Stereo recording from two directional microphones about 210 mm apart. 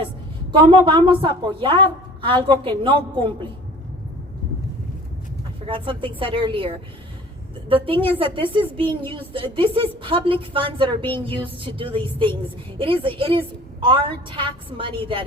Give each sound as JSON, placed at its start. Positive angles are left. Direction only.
{"t": 0.5, "sound": "a woman's voice", "side_deg": -25}
{"t": 5.6, "sound": "a woman's voice", "side_deg": -25}